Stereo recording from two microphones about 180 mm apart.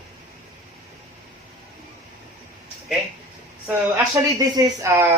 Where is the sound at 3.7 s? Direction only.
20° right (ahead or behind).